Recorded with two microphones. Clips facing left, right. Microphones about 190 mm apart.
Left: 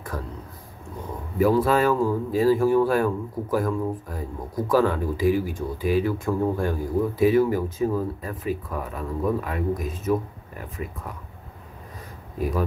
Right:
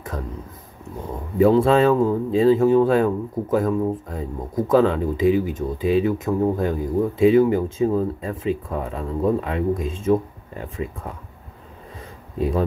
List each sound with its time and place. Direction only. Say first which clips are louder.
0.1 s speech: right 2 dB; 20° right (ahead or behind)
1.4 s speech: right 4 dB; 25° right (ahead or behind)
12.4 s speech: right 4 dB; 25° right (ahead or behind)